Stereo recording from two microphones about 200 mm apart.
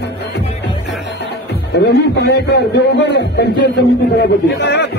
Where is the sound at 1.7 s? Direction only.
55° left (ahead or behind).